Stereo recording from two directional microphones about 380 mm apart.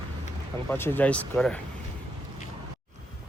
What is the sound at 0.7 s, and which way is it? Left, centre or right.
Speech, centre.